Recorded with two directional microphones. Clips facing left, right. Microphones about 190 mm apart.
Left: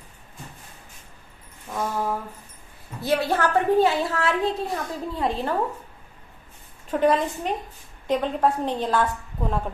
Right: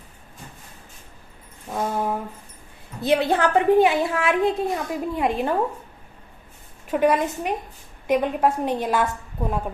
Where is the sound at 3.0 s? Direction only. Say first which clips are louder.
Right 3 dB; 20° right (ahead or behind).